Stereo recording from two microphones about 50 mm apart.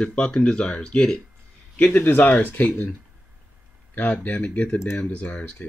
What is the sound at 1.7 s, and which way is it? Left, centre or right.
Speech, left.